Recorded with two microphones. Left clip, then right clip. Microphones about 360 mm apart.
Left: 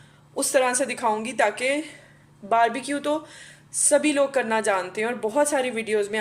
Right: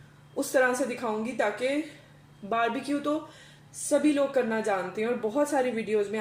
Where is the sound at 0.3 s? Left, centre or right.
Left.